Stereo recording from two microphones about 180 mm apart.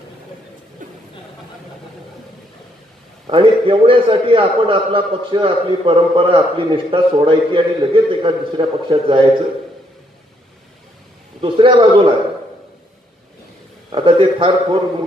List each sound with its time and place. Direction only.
3.3 s a man's voice: 30° right (ahead or behind)
11.4 s a man's voice: 30° right (ahead or behind)
13.9 s a man's voice: 30° right (ahead or behind)